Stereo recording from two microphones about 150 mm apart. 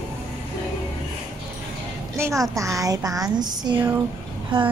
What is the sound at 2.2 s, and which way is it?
A woman's voice, 20° right (ahead or behind).